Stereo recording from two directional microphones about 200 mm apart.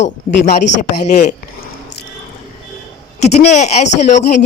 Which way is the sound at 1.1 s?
40° left (ahead or behind).